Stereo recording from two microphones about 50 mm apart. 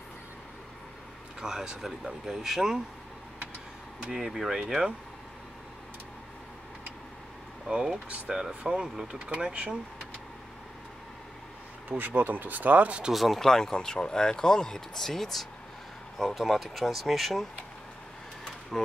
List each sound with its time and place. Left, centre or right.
1.4 s speech: centre
4.1 s speech: centre
7.6 s speech: centre
12.0 s speech: right
13.1 s speech: centre
18.7 s speech: centre